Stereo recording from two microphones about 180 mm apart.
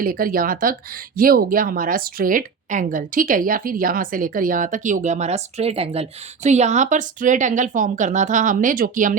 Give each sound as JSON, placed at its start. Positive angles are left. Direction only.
{"t": 0.0, "sound": "speech", "side_deg": -50}